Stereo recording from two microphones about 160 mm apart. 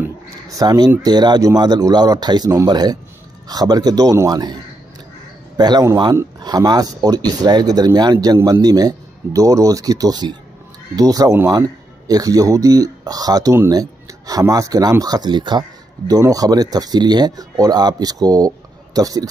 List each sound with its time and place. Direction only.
0.0 s speech: 20° right (ahead or behind)
5.6 s speech: 25° right (ahead or behind)